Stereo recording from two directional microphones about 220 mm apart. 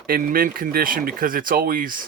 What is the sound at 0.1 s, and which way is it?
Speech, 40° right (ahead or behind).